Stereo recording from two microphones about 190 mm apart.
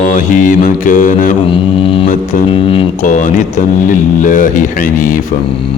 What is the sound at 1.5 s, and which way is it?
Mantra, 30° left (ahead or behind).